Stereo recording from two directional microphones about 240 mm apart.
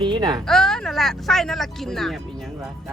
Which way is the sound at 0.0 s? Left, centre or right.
Centre.